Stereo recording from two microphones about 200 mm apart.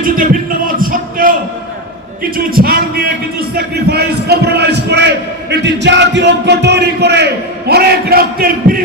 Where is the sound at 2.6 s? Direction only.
50° right (ahead or behind).